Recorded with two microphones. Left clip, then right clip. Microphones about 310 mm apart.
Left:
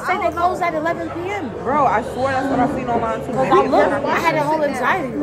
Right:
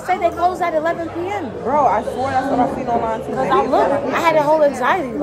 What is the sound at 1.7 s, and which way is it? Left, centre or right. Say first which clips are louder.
Speech: right 1 dB; right.